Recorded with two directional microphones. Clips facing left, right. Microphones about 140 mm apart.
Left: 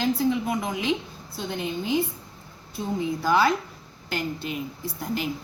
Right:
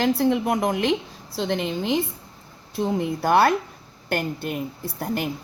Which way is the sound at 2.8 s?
65° right (ahead or behind).